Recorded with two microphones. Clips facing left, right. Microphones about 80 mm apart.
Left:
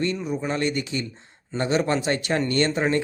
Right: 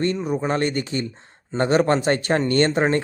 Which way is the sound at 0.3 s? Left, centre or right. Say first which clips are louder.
Right 3 dB; right.